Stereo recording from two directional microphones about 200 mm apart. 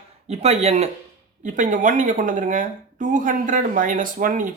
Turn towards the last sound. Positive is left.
turn(degrees=-40)  # may be behind; listen again after turning